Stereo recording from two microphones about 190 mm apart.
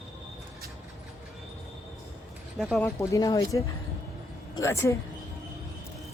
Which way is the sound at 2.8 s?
15° left (ahead or behind).